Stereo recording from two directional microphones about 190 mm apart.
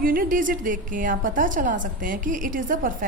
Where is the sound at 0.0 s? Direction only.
50° right (ahead or behind).